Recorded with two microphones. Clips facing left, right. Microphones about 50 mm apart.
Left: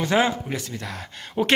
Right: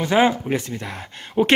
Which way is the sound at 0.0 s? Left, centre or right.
Centre.